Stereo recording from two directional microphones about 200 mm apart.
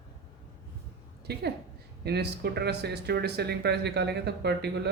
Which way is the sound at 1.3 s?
55° right (ahead or behind).